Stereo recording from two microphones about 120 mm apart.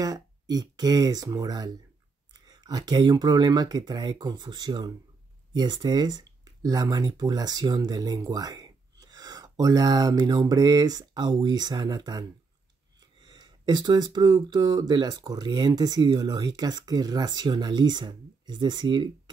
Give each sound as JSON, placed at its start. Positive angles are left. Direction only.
{"t": 0.0, "sound": "speech", "side_deg": -30}